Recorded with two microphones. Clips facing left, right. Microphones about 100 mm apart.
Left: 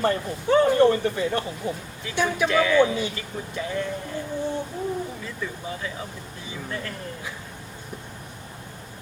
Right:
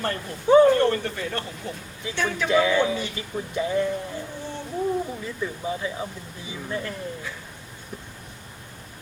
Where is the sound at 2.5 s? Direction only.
15° right (ahead or behind).